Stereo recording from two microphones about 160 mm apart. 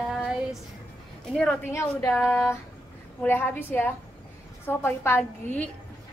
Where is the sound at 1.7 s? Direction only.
15° left (ahead or behind).